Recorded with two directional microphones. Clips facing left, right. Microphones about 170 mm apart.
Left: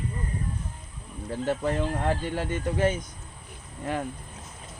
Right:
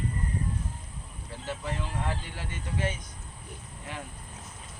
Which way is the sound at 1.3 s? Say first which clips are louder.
Left 9 dB; 50° left (ahead or behind).